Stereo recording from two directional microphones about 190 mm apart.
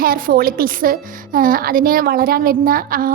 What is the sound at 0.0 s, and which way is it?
A woman's voice, 50° right (ahead or behind).